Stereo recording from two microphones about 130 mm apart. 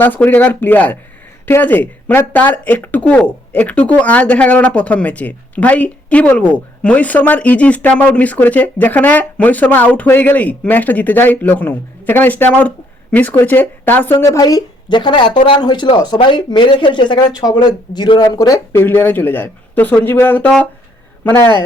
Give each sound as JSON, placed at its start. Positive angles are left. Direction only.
{"t": 0.0, "sound": "speech", "side_deg": 15}
{"t": 18.7, "sound": "speech", "side_deg": 15}